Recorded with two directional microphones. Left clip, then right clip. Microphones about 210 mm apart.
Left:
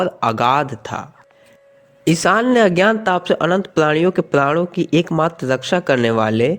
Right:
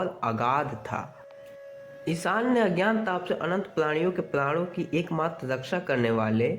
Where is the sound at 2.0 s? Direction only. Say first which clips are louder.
Left 12 dB; 40° left (ahead or behind).